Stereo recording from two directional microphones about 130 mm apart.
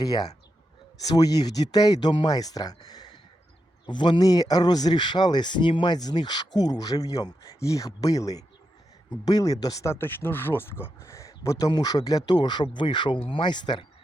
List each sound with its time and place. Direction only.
0.0 s speech: 30° left (ahead or behind)